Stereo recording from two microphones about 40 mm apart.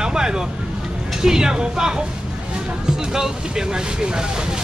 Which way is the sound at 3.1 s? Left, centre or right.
Centre.